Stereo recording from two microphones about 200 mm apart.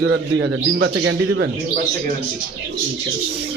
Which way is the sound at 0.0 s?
60° right (ahead or behind).